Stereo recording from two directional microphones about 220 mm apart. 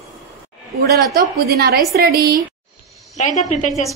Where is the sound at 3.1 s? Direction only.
35° left (ahead or behind).